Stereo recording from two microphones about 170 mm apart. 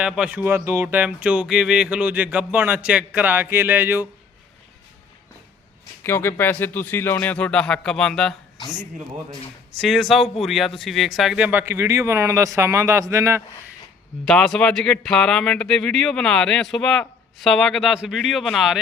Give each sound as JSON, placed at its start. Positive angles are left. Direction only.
{"t": 0.0, "sound": "speech", "side_deg": -5}
{"t": 6.0, "sound": "speech", "side_deg": 15}
{"t": 9.7, "sound": "speech", "side_deg": 0}
{"t": 14.3, "sound": "speech", "side_deg": 5}